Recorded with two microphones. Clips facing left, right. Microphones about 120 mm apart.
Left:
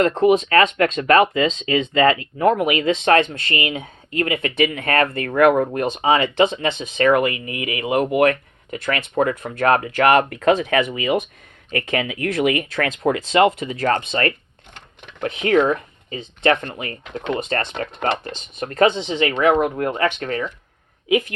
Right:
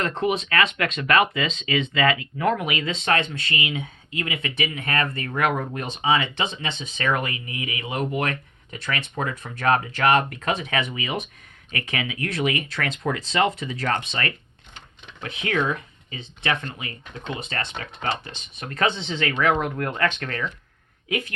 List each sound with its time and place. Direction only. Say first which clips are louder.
0.0 s speech: left 9 dB; 35° left (ahead or behind)
2.8 s speech: left 9 dB; 45° left (ahead or behind)
10.2 s speech: left 9 dB; 45° left (ahead or behind)
17.1 s speech: left 10 dB; 65° left (ahead or behind)
17.6 s speech: left 7 dB; 50° left (ahead or behind)
18.8 s speech: left 7 dB; 15° left (ahead or behind)